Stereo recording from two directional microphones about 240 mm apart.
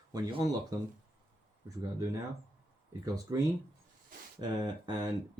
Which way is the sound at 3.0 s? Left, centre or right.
Centre.